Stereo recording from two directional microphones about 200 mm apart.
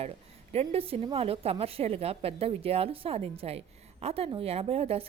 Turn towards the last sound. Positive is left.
turn(degrees=-30)  # may be behind; listen again after turning